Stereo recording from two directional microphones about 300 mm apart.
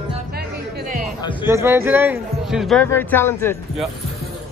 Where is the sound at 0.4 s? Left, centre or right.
Right.